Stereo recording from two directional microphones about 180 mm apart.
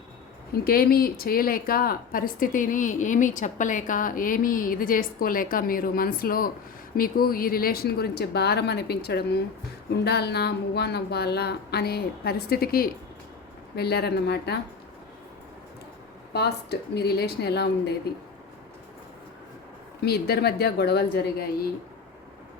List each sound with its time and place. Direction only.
0.5 s speech: 55° left (ahead or behind)
16.3 s speech: 65° left (ahead or behind)
20.1 s speech: 60° left (ahead or behind)